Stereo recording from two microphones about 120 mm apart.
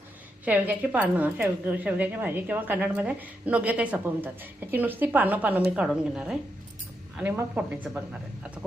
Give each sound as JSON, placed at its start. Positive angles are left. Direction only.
{"t": 0.4, "sound": "a woman's voice", "side_deg": -15}